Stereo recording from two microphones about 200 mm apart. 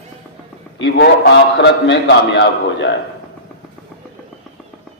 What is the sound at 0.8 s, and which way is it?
A man's voice, 60° left (ahead or behind).